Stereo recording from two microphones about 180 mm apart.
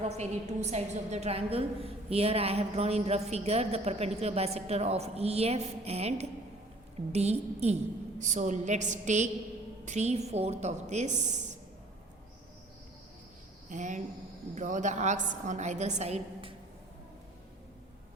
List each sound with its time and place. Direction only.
0.0 s a woman's voice: 40° right (ahead or behind)
13.7 s a woman's voice: 45° right (ahead or behind)